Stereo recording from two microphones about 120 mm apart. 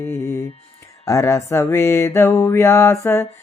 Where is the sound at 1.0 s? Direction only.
25° left (ahead or behind).